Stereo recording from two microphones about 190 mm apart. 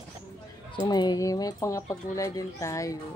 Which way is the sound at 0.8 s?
20° left (ahead or behind).